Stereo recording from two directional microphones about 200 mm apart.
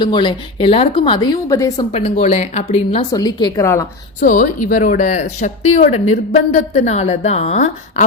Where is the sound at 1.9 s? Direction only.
35° left (ahead or behind).